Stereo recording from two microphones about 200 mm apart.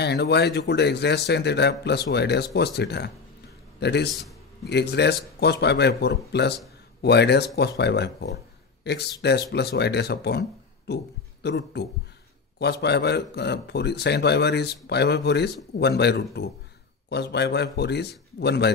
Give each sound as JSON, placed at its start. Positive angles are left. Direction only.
{"t": 0.0, "sound": "a man's voice", "side_deg": 55}